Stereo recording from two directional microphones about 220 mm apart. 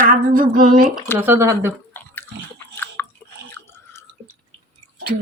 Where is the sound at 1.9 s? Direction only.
10° left (ahead or behind).